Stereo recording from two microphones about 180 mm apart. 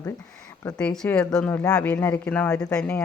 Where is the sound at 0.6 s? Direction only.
10° left (ahead or behind).